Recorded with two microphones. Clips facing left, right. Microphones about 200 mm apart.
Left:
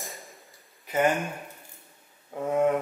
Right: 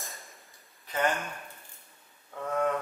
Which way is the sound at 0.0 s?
Centre (ahead or behind).